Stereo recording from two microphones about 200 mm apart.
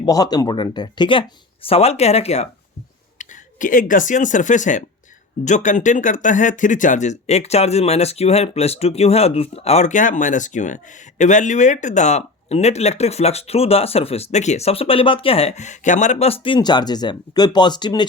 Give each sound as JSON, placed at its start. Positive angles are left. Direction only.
{"t": 0.0, "sound": "speech", "side_deg": 20}